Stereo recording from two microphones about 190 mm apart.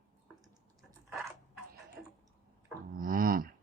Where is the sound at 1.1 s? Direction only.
10° right (ahead or behind).